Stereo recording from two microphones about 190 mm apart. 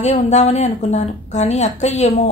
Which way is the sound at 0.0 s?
30° left (ahead or behind).